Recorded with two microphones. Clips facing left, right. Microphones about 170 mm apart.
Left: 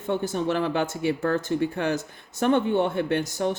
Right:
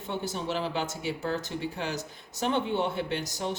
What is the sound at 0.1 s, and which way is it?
Speech, 55° left (ahead or behind).